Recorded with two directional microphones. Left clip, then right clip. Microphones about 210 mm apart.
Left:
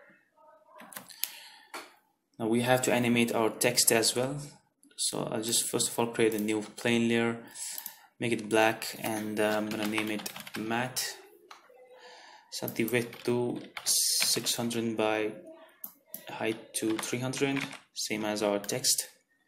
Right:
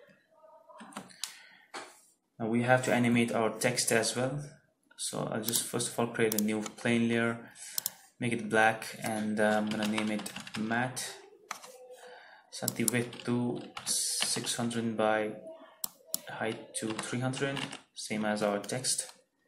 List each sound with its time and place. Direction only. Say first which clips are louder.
2.3 s speech: left 1 dB; 40° left (ahead or behind)
12.4 s speech: left 2 dB; 35° left (ahead or behind)